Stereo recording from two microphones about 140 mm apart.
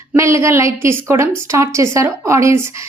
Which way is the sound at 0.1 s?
20° right (ahead or behind).